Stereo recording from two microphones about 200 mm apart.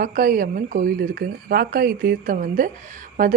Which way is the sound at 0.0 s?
45° right (ahead or behind).